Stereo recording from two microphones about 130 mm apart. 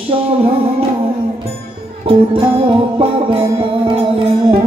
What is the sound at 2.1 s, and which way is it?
Music, 45° right (ahead or behind).